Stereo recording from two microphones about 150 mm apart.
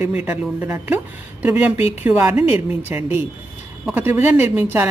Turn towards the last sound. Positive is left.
turn(degrees=-15)  # may be behind; listen again after turning